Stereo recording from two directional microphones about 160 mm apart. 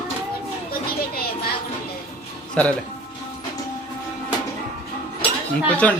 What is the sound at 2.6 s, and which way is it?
Speech, 5° left (ahead or behind).